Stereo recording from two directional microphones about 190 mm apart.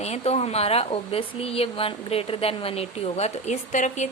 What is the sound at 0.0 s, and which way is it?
A woman's voice, 35° left (ahead or behind).